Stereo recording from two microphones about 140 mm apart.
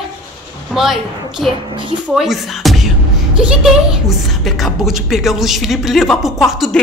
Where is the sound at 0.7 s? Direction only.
Centre (ahead or behind).